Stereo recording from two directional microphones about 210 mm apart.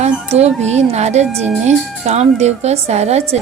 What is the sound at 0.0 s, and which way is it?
Speech, 30° right (ahead or behind).